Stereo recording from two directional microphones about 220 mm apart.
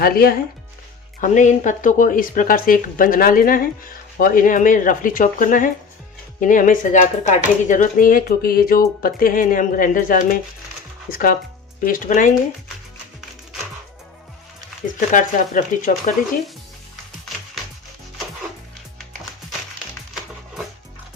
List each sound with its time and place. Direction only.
0.0 s speech: 45° left (ahead or behind)
14.9 s speech: 35° left (ahead or behind)